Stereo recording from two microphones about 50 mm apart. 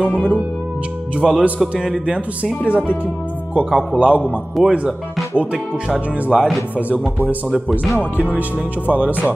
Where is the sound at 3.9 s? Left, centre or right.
Right.